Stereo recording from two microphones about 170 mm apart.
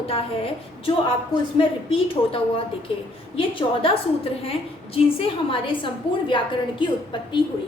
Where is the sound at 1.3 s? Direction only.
30° left (ahead or behind).